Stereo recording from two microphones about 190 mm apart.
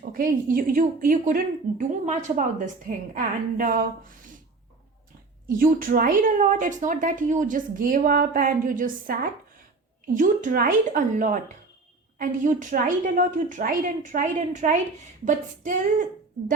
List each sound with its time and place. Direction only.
0.0 s a woman's voice: 50° right (ahead or behind)
5.5 s a woman's voice: 45° right (ahead or behind)
10.2 s a woman's voice: 45° right (ahead or behind)